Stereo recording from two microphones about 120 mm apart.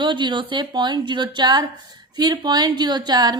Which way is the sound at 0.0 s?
40° right (ahead or behind).